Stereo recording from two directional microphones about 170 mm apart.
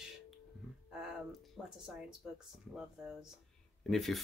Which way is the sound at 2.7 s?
5° right (ahead or behind).